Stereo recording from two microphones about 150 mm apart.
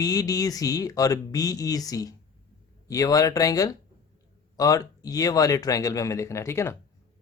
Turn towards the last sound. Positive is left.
turn(degrees=15)  # may be behind; listen again after turning